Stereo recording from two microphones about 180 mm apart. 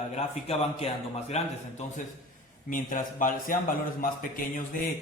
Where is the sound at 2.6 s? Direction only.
45° left (ahead or behind).